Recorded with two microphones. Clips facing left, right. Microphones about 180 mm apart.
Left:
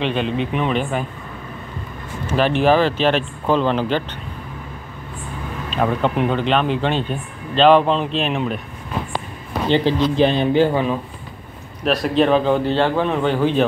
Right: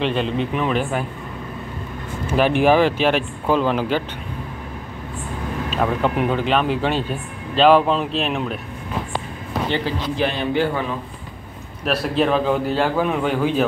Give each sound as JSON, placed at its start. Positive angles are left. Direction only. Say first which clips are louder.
{"t": 0.0, "sound": "speech", "louder": "even", "side_deg": 0}
{"t": 2.2, "sound": "a man's voice", "louder": "even", "side_deg": -15}
{"t": 5.7, "sound": "speech", "louder": "left 2 dB", "side_deg": -5}
{"t": 9.7, "sound": "a man's voice", "louder": "left 9 dB", "side_deg": 25}
{"t": 11.8, "sound": "a man's voice", "louder": "left 3 dB", "side_deg": -5}